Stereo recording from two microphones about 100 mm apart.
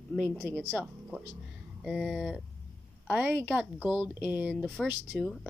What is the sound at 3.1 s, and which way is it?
Speech, 20° right (ahead or behind).